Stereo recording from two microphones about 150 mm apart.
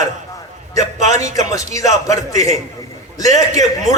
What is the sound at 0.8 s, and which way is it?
A man's voice, 55° right (ahead or behind).